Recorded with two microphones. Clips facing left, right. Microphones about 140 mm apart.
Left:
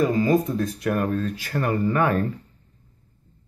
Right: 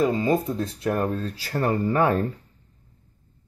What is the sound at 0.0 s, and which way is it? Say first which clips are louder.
Speech: left 2 dB; 25° right (ahead or behind).